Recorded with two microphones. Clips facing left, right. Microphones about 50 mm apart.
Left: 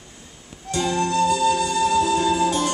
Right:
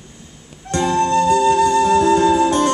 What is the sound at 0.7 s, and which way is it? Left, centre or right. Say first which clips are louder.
Flute: right 6 dB; right.